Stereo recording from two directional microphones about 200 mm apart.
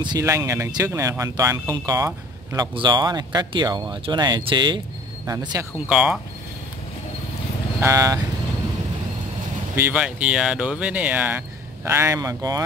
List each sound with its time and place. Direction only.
0.0 s speech: 20° right (ahead or behind)
5.9 s speech: 5° right (ahead or behind)
7.8 s speech: 15° right (ahead or behind)
9.8 s speech: 10° right (ahead or behind)